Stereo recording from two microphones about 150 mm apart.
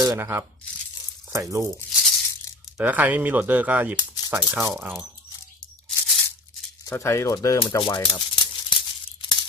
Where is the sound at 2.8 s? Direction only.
10° right (ahead or behind).